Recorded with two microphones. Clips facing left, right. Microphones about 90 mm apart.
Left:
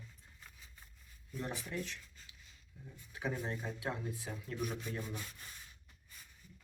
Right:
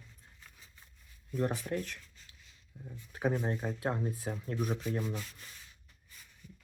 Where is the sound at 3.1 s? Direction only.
45° right (ahead or behind).